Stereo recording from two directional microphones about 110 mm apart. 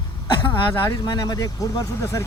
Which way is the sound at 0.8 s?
40° left (ahead or behind).